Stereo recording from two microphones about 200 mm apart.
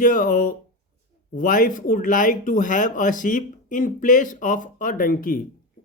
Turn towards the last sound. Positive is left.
turn(degrees=45)  # may be behind; listen again after turning